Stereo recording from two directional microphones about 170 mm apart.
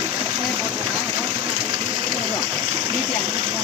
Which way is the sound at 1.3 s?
25° right (ahead or behind).